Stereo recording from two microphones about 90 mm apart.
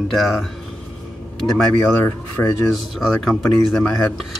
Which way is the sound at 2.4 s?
25° left (ahead or behind).